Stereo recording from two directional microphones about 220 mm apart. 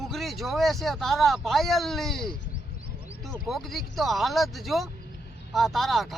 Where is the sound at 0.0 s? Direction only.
Centre (ahead or behind).